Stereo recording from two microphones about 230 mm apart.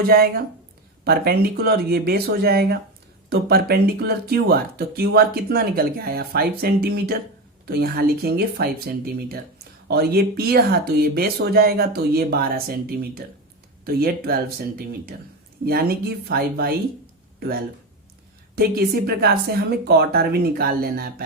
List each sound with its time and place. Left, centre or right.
0.0 s speech: right
9.9 s speech: right
18.5 s speech: right